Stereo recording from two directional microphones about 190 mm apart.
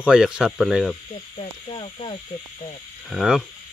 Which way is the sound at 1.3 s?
30° left (ahead or behind).